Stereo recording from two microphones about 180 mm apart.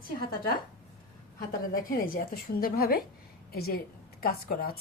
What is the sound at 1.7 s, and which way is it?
A woman's voice, 55° left (ahead or behind).